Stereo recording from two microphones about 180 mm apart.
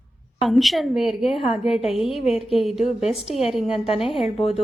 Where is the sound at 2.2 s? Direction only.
35° left (ahead or behind).